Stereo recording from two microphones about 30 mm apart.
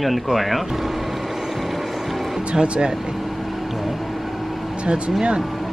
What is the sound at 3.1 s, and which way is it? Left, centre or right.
Vehicle, centre.